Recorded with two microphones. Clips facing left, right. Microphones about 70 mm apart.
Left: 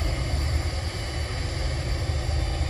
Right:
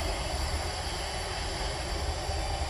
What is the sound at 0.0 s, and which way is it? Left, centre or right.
Vehicle, left.